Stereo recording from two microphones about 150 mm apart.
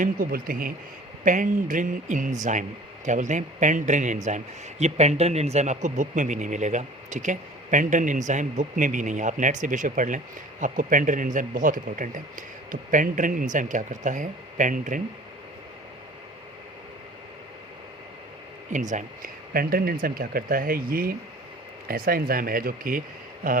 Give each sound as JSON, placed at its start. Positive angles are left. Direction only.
{"t": 0.0, "sound": "speech", "side_deg": -75}
{"t": 1.2, "sound": "a man's voice", "side_deg": -60}
{"t": 18.7, "sound": "speech", "side_deg": -55}